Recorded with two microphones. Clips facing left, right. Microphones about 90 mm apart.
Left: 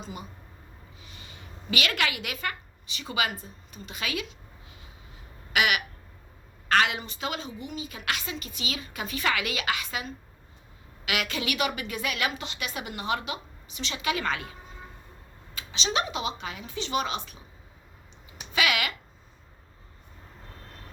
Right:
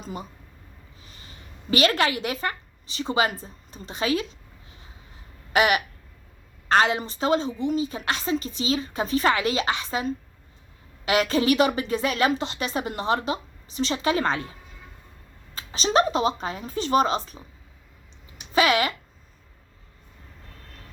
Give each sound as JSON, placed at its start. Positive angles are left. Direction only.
{"t": 0.0, "sound": "a woman's voice", "side_deg": -40}
{"t": 5.5, "sound": "a woman's voice", "side_deg": -35}
{"t": 15.5, "sound": "a woman's voice", "side_deg": -40}
{"t": 18.5, "sound": "a woman's voice", "side_deg": -35}